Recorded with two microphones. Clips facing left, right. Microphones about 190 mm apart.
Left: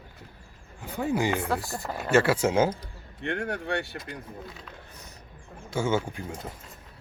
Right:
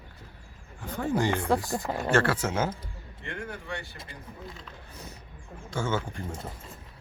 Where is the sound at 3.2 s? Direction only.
70° left (ahead or behind).